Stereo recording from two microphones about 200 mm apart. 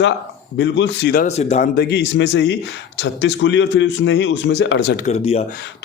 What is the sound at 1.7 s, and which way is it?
A man's voice, 60° left (ahead or behind).